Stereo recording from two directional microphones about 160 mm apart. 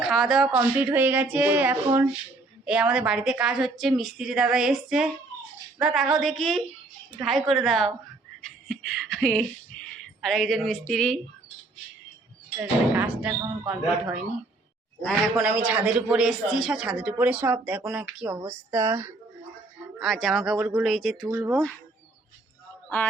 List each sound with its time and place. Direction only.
0.0 s a woman's voice: centre (ahead or behind)
12.5 s speech: 10° right (ahead or behind)
15.4 s speech: 10° right (ahead or behind)
20.0 s a woman's voice: centre (ahead or behind)
21.2 s speech: 15° right (ahead or behind)